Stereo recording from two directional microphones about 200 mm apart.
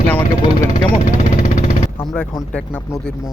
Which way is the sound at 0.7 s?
40° left (ahead or behind).